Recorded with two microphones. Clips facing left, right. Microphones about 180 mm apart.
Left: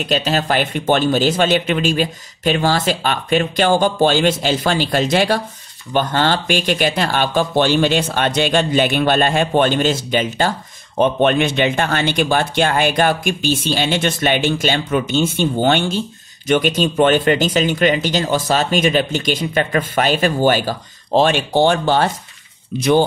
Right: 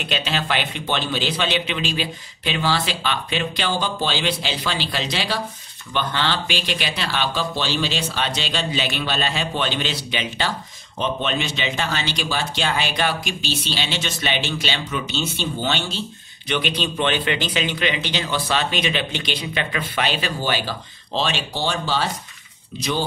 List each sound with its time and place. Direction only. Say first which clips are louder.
0.0 s speech: left 7 dB; 40° left (ahead or behind); by 23.0 s 55° left (ahead or behind)